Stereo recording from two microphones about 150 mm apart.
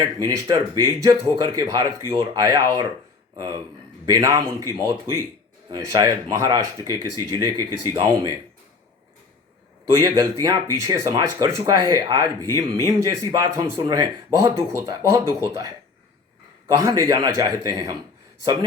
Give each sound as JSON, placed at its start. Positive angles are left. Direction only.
{"t": 0.3, "sound": "speech", "side_deg": -25}
{"t": 9.9, "sound": "speech", "side_deg": -20}
{"t": 16.6, "sound": "speech", "side_deg": -20}